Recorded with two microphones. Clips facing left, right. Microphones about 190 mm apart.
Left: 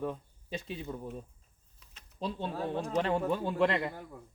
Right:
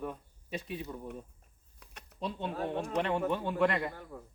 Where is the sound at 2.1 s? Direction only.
30° left (ahead or behind).